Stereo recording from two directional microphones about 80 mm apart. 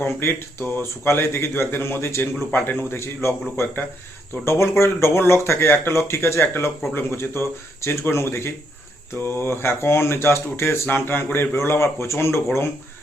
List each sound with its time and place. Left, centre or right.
0.0 s speech: left
4.4 s speech: left